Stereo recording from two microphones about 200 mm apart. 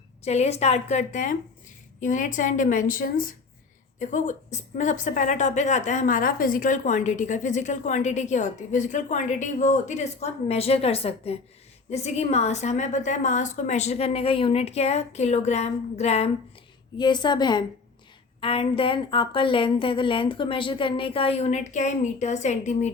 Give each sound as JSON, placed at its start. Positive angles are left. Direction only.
{"t": 0.3, "sound": "a woman's voice", "side_deg": 30}
{"t": 17.0, "sound": "a woman's voice", "side_deg": 20}